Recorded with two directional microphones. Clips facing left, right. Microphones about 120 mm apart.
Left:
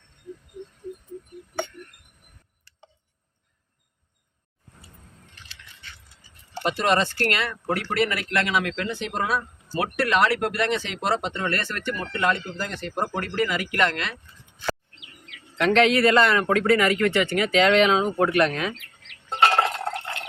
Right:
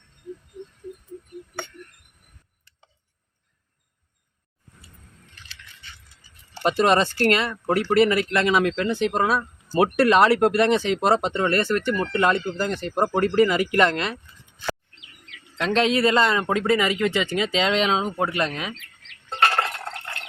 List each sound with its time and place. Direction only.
6.6 s speech: 30° right (ahead or behind)
15.6 s speech: 25° right (ahead or behind)
19.4 s stir: 15° left (ahead or behind)